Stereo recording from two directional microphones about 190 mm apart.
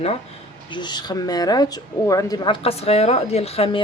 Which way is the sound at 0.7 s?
25° left (ahead or behind).